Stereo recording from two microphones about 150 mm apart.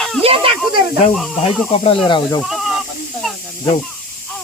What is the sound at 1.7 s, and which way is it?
Speech, 40° left (ahead or behind).